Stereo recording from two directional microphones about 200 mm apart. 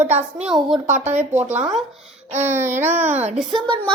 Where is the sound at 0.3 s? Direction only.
5° right (ahead or behind).